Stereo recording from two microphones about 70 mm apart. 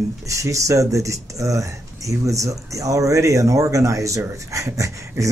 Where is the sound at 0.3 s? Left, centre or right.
Right.